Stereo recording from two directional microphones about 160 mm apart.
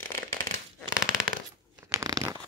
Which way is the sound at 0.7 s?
5° right (ahead or behind).